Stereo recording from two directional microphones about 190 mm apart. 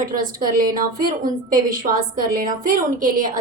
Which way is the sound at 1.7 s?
45° right (ahead or behind).